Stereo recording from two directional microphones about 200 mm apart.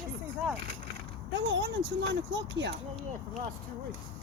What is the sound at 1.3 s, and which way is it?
Speech, 60° right (ahead or behind).